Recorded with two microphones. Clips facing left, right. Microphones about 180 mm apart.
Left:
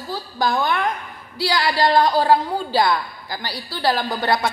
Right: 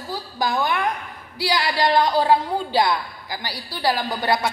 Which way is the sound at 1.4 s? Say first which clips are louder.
Left 2 dB; 20° right (ahead or behind).